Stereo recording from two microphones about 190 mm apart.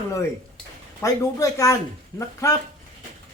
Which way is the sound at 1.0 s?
15° left (ahead or behind).